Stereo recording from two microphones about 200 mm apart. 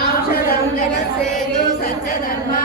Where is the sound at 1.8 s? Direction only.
45° left (ahead or behind).